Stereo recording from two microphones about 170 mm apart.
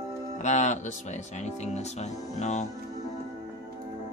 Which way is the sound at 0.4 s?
45° left (ahead or behind).